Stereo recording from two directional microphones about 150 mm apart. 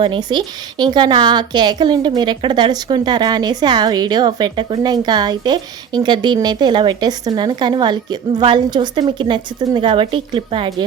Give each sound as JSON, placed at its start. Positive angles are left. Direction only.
{"t": 0.0, "sound": "a woman's voice", "side_deg": -30}